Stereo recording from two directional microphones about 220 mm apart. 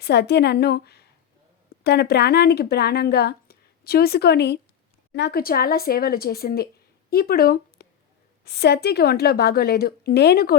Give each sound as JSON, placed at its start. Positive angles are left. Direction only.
{"t": 0.0, "sound": "speech", "side_deg": 50}